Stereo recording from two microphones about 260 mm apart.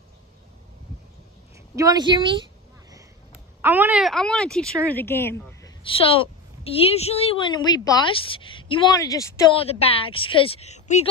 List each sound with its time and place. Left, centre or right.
1.8 s a woman's voice: centre
3.6 s speech: centre
5.9 s a woman's voice: left